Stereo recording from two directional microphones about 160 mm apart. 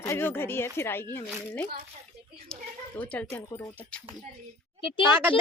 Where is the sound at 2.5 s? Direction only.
10° left (ahead or behind).